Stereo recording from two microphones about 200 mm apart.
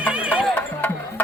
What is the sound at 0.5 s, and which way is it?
Music, 10° left (ahead or behind).